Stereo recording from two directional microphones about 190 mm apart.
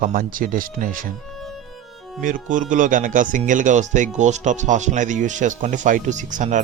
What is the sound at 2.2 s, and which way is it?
Speech, 45° right (ahead or behind).